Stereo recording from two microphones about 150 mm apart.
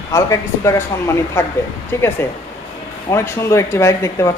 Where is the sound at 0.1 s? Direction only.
20° left (ahead or behind).